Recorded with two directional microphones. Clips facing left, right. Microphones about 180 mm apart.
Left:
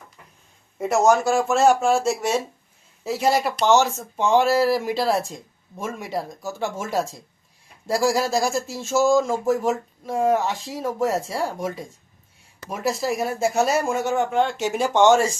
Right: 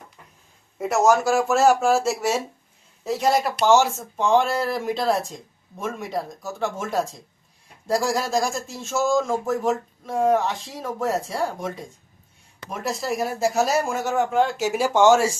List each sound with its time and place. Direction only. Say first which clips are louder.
0.8 s speech: left 1 dB; centre (ahead or behind)
3.7 s speech: right 1 dB; 10° right (ahead or behind)
4.2 s speech: left 2 dB; 5° left (ahead or behind)